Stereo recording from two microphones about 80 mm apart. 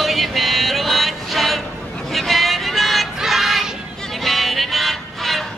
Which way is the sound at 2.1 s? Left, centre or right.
Centre.